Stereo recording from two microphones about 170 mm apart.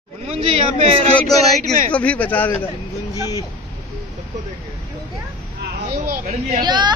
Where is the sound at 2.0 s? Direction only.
10° left (ahead or behind).